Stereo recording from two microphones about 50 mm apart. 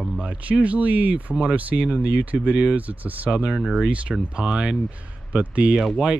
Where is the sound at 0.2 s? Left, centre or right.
Right.